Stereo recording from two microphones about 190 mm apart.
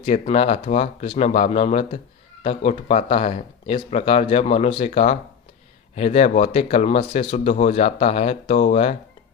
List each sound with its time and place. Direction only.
0.0 s speech: 35° left (ahead or behind)